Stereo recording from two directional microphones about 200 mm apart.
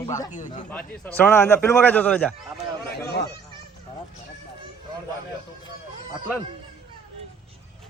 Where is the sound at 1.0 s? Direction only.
10° left (ahead or behind).